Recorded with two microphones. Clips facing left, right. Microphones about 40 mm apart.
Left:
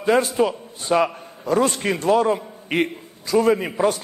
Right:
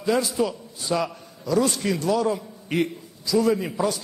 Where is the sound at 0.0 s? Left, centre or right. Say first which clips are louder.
Left 4 dB; left.